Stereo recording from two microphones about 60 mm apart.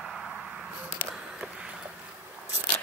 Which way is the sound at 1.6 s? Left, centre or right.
Centre.